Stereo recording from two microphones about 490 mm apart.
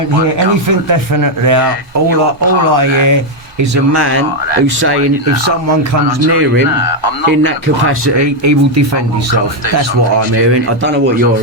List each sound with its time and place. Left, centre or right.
0.7 s speech: right
2.7 s speech: right
3.6 s speech: right
7.4 s speech: right
10.3 s speech: right